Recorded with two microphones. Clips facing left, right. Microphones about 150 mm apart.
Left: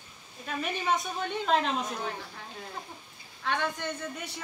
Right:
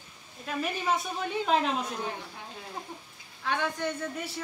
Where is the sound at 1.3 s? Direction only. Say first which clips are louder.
Right 1 dB; 5° right (ahead or behind).